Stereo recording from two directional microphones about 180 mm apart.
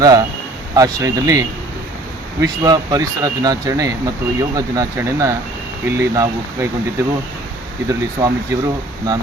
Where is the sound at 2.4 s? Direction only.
20° right (ahead or behind).